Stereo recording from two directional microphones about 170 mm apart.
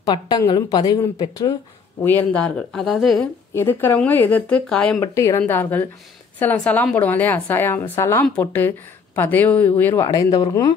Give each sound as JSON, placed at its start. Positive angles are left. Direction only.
{"t": 0.5, "sound": "a woman's voice", "side_deg": 20}
{"t": 2.0, "sound": "speech", "side_deg": 10}
{"t": 3.5, "sound": "a woman's voice", "side_deg": 15}
{"t": 5.0, "sound": "a woman's voice", "side_deg": 15}
{"t": 10.0, "sound": "a woman's voice", "side_deg": 25}